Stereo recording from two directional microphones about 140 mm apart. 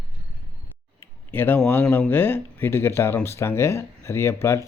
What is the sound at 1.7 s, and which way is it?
Speech, 15° left (ahead or behind).